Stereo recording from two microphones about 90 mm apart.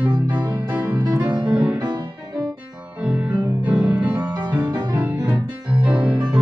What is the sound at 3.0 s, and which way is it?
Music, 10° right (ahead or behind).